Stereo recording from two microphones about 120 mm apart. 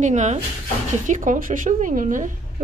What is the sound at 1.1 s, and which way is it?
Speech, 90° right.